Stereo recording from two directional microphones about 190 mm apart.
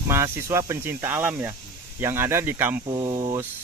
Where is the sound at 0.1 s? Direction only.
15° right (ahead or behind).